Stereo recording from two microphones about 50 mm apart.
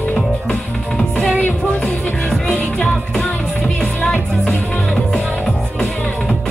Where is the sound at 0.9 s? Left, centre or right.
Centre.